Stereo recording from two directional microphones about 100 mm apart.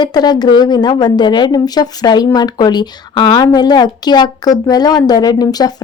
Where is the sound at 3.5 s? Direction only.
45° left (ahead or behind).